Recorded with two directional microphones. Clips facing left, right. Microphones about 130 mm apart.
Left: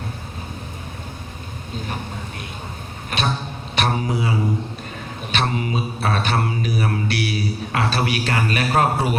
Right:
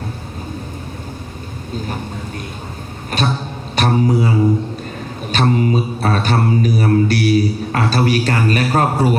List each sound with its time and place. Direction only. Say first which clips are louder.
3.1 s music: right 4 dB; 40° right (ahead or behind)
3.8 s mantra: right 7 dB; 40° right (ahead or behind)
5.3 s mantra: right 7 dB; 40° right (ahead or behind)